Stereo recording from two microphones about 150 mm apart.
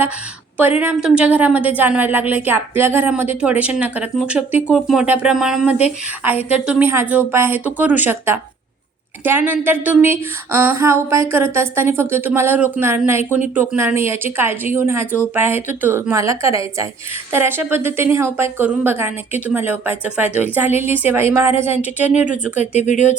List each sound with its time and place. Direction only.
0.6 s a woman's voice: 10° right (ahead or behind)
22.6 s speech: 50° left (ahead or behind)